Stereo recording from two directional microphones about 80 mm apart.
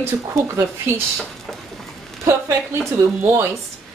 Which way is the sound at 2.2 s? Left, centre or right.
Right.